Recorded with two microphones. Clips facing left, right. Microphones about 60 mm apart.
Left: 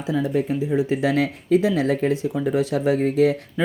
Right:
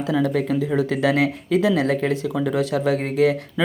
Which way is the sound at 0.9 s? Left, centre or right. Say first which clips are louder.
Right 1 dB; right.